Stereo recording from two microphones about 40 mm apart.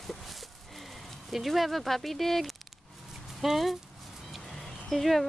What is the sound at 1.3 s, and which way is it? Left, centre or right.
Speech, centre.